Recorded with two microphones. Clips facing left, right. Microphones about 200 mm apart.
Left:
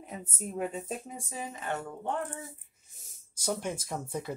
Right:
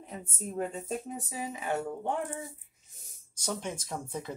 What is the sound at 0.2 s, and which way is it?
Speech, 10° left (ahead or behind).